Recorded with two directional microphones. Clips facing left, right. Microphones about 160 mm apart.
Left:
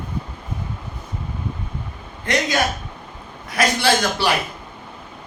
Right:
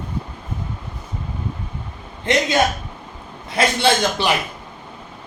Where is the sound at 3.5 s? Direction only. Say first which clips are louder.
Right 1 dB; 25° right (ahead or behind).